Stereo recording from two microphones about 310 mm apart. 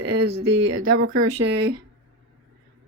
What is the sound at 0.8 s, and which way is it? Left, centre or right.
Speech, right.